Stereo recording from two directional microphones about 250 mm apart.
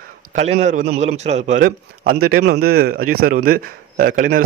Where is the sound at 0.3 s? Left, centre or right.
Right.